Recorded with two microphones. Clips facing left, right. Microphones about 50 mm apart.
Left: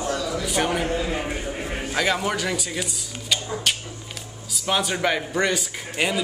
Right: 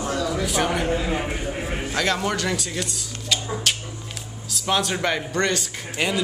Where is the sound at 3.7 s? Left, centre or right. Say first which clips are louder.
Even; centre.